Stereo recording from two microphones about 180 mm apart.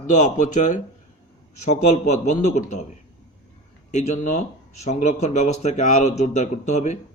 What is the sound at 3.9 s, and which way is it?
Speech, 40° left (ahead or behind).